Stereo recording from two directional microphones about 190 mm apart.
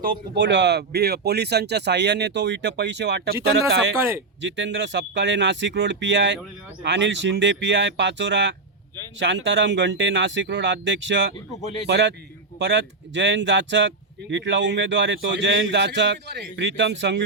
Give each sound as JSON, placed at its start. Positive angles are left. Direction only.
{"t": 0.0, "sound": "speech", "side_deg": -60}
{"t": 3.9, "sound": "speech", "side_deg": -15}
{"t": 4.4, "sound": "speech", "side_deg": -75}